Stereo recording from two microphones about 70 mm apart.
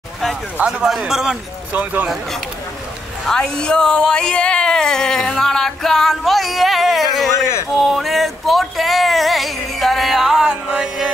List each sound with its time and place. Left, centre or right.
0.7 s a man's voice: centre
1.7 s speech: right
3.3 s speech: centre
7.7 s a sound: centre